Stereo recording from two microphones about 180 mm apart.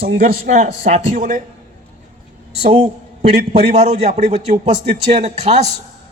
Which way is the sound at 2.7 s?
40° right (ahead or behind).